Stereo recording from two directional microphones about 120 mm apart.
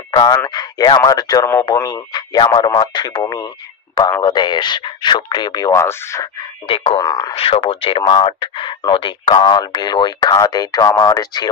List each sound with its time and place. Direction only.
0.5 s speech: 35° left (ahead or behind)
2.4 s speech: 45° left (ahead or behind)
5.9 s speech: 20° left (ahead or behind)
6.6 s speech: 50° left (ahead or behind)
7.0 s speech: 35° left (ahead or behind)
7.3 s speech: 50° left (ahead or behind); by 11.4 s 35° left (ahead or behind)